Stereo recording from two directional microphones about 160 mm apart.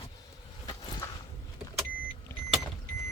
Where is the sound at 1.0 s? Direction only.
20° left (ahead or behind).